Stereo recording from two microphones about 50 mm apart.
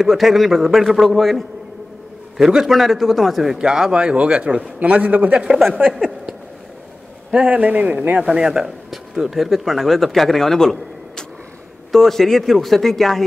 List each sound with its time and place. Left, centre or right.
0.0 s a man's voice: centre
3.5 s a man's voice: centre
5.8 s speech: right
7.2 s a man's voice: right
8.2 s a man's voice: centre